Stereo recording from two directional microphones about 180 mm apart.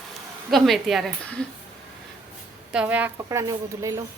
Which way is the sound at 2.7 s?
5° right (ahead or behind).